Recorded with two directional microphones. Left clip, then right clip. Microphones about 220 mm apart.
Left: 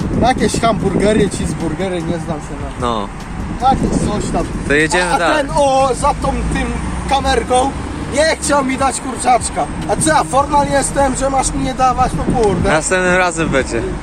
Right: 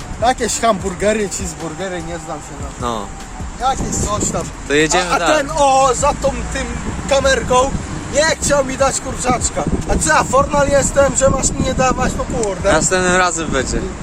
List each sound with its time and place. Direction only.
0.2 s speech: 10° right (ahead or behind)
4.7 s speech: centre (ahead or behind)